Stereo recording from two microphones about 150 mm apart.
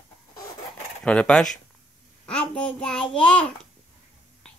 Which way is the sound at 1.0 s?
10° left (ahead or behind).